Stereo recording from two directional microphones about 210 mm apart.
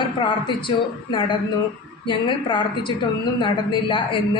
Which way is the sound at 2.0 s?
20° left (ahead or behind).